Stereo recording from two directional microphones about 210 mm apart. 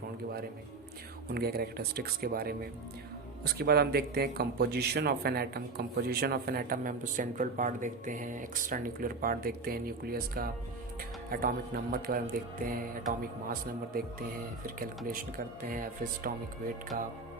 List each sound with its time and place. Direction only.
1.3 s speech: 50° right (ahead or behind)
14.8 s speech: 40° right (ahead or behind)